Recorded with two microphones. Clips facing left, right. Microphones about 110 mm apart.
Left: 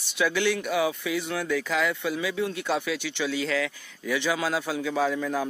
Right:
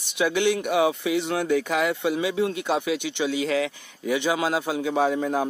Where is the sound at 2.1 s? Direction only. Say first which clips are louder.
Right 4 dB; 25° right (ahead or behind).